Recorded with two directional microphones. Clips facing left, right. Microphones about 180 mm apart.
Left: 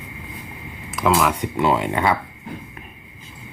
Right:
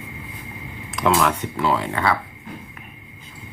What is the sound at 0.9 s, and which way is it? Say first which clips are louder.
Speech: even; centre (ahead or behind).